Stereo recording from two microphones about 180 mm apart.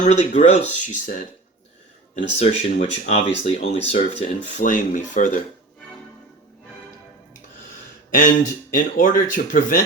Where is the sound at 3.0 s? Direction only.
40° left (ahead or behind).